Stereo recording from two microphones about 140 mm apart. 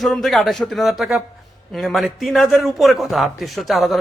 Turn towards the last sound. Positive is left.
turn(degrees=0)  # may be behind; listen again after turning